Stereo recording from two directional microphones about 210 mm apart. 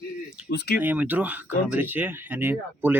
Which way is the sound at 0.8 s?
10° right (ahead or behind).